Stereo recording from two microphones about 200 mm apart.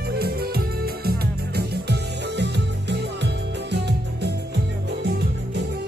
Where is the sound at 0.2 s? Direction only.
50° right (ahead or behind).